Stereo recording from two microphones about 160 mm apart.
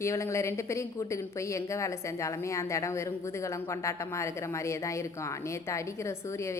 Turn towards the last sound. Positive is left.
turn(degrees=20)  # may be behind; listen again after turning